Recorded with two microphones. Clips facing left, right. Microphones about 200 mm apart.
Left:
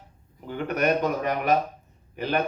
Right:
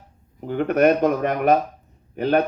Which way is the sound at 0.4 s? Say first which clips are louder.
Right 7 dB; 50° right (ahead or behind).